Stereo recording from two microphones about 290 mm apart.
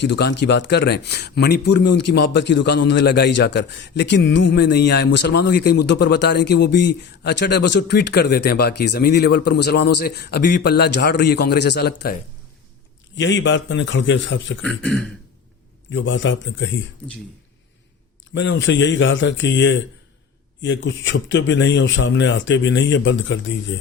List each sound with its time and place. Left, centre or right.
0.0 s speech: left
13.1 s speech: left
14.6 s speech: centre
15.9 s speech: left
18.3 s speech: left